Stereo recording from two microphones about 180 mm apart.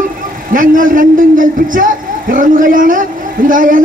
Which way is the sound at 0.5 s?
50° right (ahead or behind).